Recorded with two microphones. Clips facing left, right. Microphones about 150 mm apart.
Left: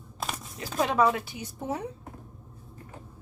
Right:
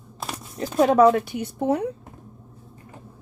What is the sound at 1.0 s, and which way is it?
Speech, 55° right (ahead or behind).